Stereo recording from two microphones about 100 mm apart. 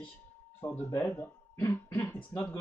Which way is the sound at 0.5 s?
25° left (ahead or behind).